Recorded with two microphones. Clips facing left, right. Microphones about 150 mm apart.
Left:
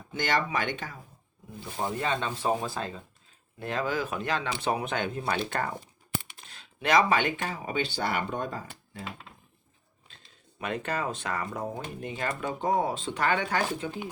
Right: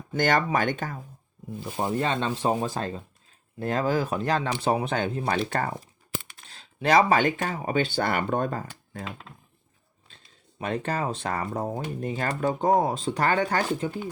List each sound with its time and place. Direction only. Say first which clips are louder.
0.1 s speech: right 5 dB; 50° right (ahead or behind)
1.7 s speech: right 3 dB; 25° right (ahead or behind)
6.5 s speech: right 3 dB; 35° right (ahead or behind); by 9.0 s 50° right (ahead or behind)
10.6 s speech: right 3 dB; 35° right (ahead or behind)